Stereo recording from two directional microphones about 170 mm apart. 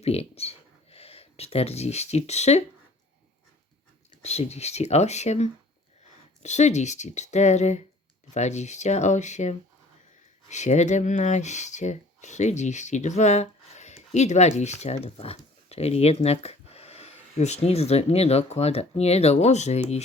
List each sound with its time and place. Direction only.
0.0 s speech: 35° left (ahead or behind)
4.2 s speech: 40° left (ahead or behind)